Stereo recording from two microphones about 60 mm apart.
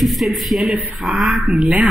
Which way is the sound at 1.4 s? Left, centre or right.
Right.